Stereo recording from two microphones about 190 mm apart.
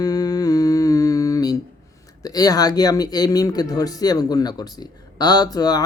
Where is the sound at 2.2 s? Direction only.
20° left (ahead or behind).